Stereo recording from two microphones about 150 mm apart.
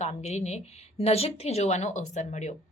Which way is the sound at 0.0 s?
50° left (ahead or behind).